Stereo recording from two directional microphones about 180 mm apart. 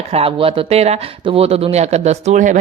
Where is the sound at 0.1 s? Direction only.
30° right (ahead or behind).